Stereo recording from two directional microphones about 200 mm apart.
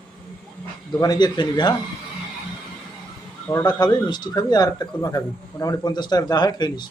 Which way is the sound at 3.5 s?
20° left (ahead or behind).